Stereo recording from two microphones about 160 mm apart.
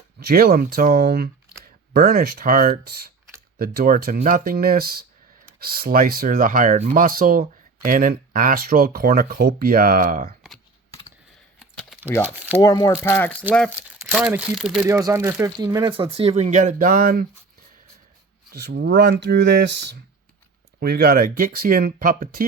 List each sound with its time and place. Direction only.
0.2 s speech: 75° right (ahead or behind); by 7.0 s 50° right (ahead or behind)
7.0 s speech: 65° right (ahead or behind)
11.6 s typing: centre (ahead or behind)
12.2 s speech: 10° right (ahead or behind)
12.6 s speech: 25° left (ahead or behind)
13.7 s speech: 10° right (ahead or behind)
14.8 s speech: 20° right (ahead or behind)
16.1 s speech: 40° right (ahead or behind); by 17.2 s 60° right (ahead or behind)
18.5 s speech: 90° right
20.7 s speech: 80° right; by 22.4 s 65° right (ahead or behind)